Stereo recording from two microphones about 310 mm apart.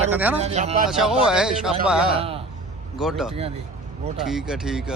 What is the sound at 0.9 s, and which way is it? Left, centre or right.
Speech, centre.